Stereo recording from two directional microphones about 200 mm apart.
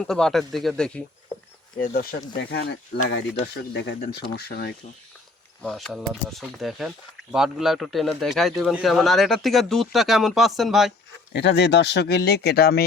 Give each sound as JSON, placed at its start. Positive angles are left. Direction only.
{"t": 0.0, "sound": "speech", "side_deg": 0}
{"t": 1.8, "sound": "speech", "side_deg": 50}
{"t": 5.6, "sound": "speech", "side_deg": 0}
{"t": 11.3, "sound": "speech", "side_deg": 60}